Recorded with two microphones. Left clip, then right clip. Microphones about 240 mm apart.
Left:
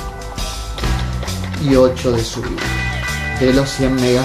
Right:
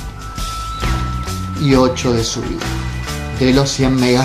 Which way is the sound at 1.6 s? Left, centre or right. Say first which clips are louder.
Left 1 dB; right.